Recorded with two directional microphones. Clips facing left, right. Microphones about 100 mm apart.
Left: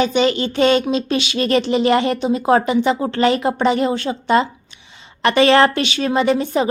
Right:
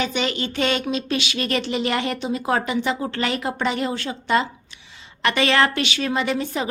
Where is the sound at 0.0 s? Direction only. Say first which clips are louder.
Left 8 dB; 30° left (ahead or behind).